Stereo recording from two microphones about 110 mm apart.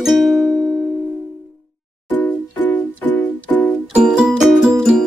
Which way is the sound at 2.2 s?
15° left (ahead or behind).